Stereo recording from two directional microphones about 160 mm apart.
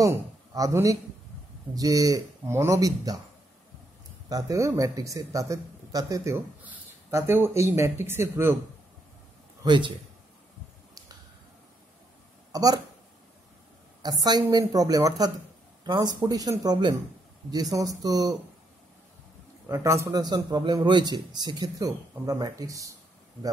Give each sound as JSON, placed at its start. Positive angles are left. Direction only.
{"t": 0.0, "sound": "a sound", "side_deg": -20}
{"t": 1.8, "sound": "a man's voice", "side_deg": -20}
{"t": 4.3, "sound": "a man's voice", "side_deg": -20}
{"t": 9.6, "sound": "a man's voice", "side_deg": -30}
{"t": 12.5, "sound": "a man's voice", "side_deg": -25}
{"t": 14.0, "sound": "a man's voice", "side_deg": -25}
{"t": 19.7, "sound": "a man's voice", "side_deg": -15}